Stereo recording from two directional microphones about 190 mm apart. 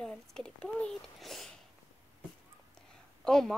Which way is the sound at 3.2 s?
5° left (ahead or behind).